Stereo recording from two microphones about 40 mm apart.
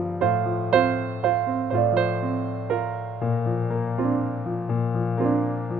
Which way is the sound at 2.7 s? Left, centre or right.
Centre.